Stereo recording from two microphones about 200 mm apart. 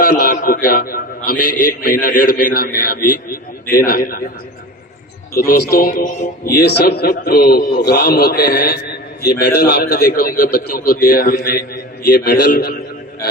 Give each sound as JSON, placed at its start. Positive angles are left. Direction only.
{"t": 0.0, "sound": "a man's voice", "side_deg": 45}
{"t": 5.4, "sound": "a man's voice", "side_deg": 45}